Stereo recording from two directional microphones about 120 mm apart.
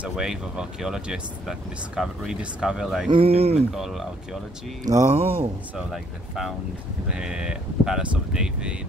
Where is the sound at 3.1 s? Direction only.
55° right (ahead or behind).